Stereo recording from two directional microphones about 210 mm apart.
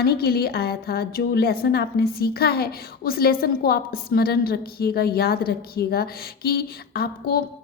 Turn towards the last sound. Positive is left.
turn(degrees=45)  # may be behind; listen again after turning